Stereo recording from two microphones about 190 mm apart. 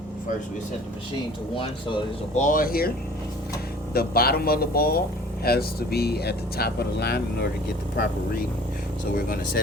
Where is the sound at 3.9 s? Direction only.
50° left (ahead or behind).